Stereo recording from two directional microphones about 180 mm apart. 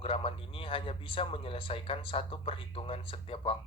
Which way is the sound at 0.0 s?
30° left (ahead or behind).